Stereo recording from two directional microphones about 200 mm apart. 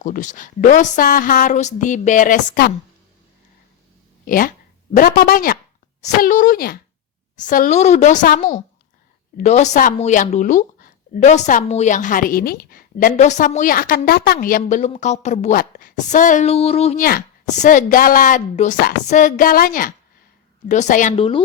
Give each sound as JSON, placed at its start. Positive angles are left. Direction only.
{"t": 0.0, "sound": "speech", "side_deg": 40}
{"t": 4.3, "sound": "speech", "side_deg": 45}
{"t": 17.0, "sound": "speech", "side_deg": 45}
{"t": 21.2, "sound": "a woman's voice", "side_deg": 25}